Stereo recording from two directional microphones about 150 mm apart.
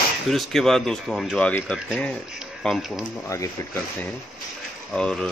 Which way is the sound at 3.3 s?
20° left (ahead or behind).